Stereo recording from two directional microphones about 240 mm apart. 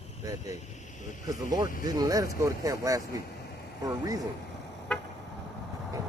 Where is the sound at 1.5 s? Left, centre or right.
Centre.